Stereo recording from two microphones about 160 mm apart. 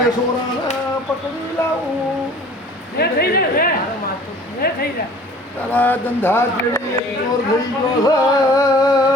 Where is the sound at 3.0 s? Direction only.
75° left (ahead or behind).